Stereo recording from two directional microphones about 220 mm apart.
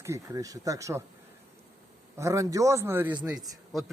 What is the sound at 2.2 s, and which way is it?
Speech, 15° right (ahead or behind).